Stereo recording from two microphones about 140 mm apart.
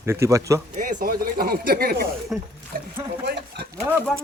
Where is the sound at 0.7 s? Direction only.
75° right (ahead or behind); by 2.1 s 90° right.